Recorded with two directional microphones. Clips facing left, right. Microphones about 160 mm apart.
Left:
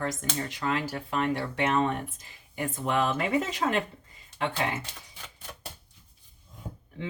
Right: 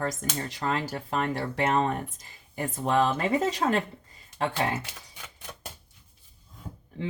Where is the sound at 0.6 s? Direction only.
35° right (ahead or behind).